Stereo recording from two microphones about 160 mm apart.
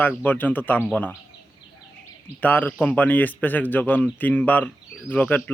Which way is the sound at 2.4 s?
10° left (ahead or behind).